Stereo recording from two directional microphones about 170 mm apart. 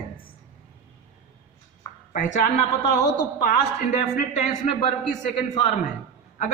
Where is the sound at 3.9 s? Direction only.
40° left (ahead or behind).